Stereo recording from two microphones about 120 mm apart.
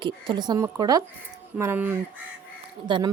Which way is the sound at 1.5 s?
20° right (ahead or behind).